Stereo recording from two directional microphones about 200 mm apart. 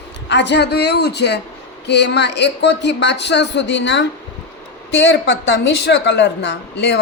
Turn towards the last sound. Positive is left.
turn(degrees=55)  # may be behind; listen again after turning